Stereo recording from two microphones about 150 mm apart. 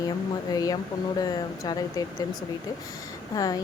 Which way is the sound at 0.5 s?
25° left (ahead or behind).